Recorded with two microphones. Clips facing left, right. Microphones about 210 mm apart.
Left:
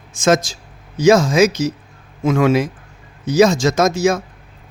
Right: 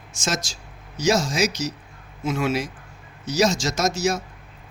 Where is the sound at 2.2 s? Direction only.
90° left.